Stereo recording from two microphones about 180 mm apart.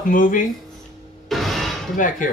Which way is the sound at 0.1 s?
50° left (ahead or behind).